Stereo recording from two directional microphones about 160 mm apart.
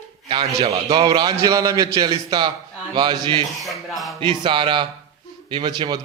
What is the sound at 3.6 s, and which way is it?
Speech, centre (ahead or behind).